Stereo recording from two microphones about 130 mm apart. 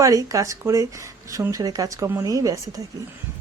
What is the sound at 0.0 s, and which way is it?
A woman's voice, 25° right (ahead or behind).